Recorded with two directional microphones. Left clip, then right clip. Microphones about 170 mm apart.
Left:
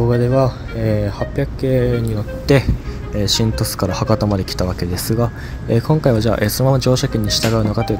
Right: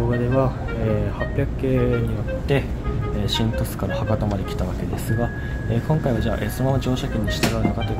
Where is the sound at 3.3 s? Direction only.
30° left (ahead or behind).